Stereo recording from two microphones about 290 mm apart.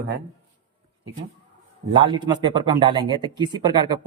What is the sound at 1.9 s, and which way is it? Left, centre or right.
Speech, centre.